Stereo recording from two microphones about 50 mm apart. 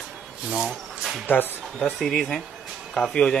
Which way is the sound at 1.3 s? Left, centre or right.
Left.